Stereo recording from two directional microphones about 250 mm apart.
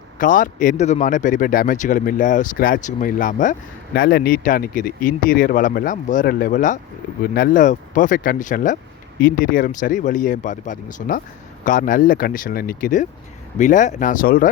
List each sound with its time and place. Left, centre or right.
0.2 s a man's voice: left